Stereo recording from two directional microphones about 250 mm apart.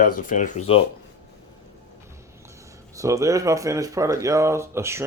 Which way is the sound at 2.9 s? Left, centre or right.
Centre.